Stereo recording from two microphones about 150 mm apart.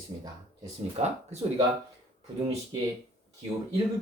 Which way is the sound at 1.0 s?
45° right (ahead or behind).